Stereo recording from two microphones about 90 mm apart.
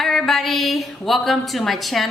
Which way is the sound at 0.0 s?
Centre (ahead or behind).